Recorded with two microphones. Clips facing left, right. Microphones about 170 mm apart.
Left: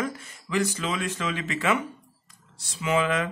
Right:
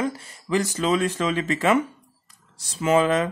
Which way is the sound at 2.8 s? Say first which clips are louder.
Right 5 dB; 40° right (ahead or behind).